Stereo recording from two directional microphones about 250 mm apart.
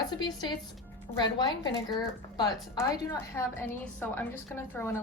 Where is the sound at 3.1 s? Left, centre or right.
Centre.